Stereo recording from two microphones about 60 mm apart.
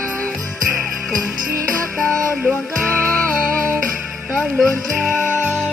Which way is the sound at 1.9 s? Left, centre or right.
Centre.